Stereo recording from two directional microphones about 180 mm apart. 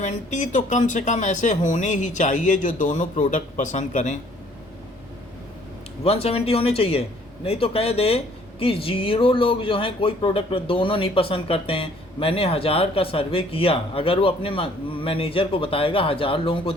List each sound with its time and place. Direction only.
0.0 s speech: 45° left (ahead or behind)
6.2 s speech: 35° left (ahead or behind)